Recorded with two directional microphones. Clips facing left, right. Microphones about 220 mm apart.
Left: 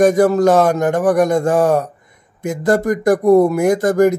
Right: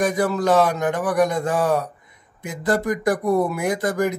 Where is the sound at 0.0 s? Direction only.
45° left (ahead or behind).